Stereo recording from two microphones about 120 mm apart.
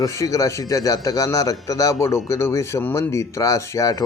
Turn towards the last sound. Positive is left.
turn(degrees=25)  # may be behind; listen again after turning